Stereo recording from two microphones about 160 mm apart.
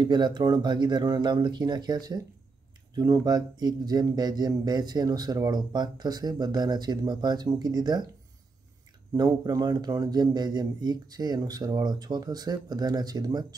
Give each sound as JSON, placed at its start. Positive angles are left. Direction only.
{"t": 0.0, "sound": "speech", "side_deg": -30}
{"t": 9.1, "sound": "speech", "side_deg": -25}